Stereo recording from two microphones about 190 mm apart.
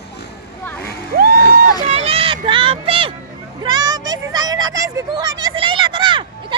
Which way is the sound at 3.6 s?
20° right (ahead or behind).